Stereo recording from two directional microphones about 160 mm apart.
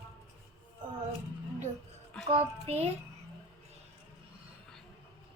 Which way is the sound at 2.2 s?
40° right (ahead or behind).